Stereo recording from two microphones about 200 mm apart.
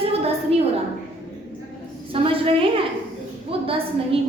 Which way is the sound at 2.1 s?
25° right (ahead or behind).